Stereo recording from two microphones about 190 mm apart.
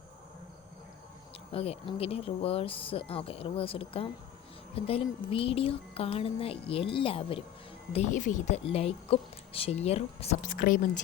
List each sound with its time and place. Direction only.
1.5 s speech: 30° left (ahead or behind)
7.9 s speech: 40° left (ahead or behind)